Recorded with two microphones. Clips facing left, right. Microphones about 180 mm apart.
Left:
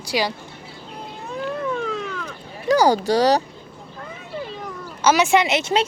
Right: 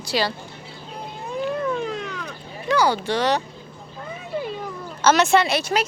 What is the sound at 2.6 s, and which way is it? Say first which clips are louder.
Speech: left 4 dB; 40° left (ahead or behind).